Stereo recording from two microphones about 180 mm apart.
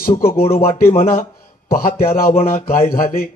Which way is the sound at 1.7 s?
55° left (ahead or behind).